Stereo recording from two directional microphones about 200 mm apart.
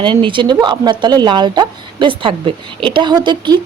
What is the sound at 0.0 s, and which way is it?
Speech, 25° right (ahead or behind).